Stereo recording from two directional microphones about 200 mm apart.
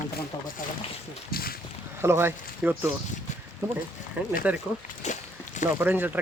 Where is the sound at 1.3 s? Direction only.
50° left (ahead or behind).